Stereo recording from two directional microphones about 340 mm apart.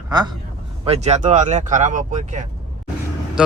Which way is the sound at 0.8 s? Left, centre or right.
Centre.